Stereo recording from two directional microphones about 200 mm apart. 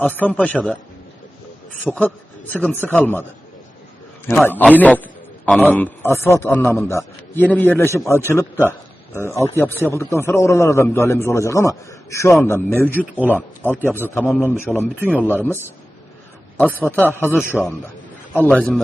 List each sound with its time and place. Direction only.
0.0 s a man's voice: 10° left (ahead or behind)
4.4 s a man's voice: 10° left (ahead or behind)
16.6 s a man's voice: 10° left (ahead or behind)
17.6 s a man's voice: centre (ahead or behind)